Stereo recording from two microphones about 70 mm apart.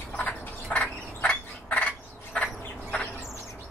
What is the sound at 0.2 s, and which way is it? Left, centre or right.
Bird, centre.